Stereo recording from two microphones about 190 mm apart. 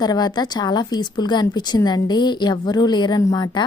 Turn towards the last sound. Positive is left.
turn(degrees=25)  # may be behind; listen again after turning